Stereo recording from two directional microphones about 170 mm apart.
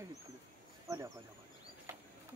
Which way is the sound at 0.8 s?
20° right (ahead or behind).